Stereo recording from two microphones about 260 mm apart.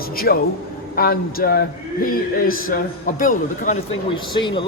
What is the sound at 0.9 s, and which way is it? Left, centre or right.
A man's voice, left.